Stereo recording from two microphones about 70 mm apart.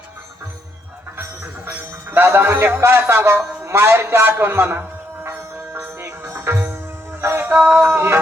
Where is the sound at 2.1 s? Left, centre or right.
Right.